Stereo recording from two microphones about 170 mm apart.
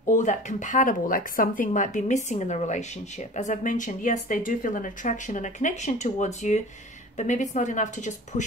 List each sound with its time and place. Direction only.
0.1 s speech: 45° left (ahead or behind)